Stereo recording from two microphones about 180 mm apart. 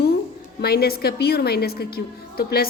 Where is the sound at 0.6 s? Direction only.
60° left (ahead or behind).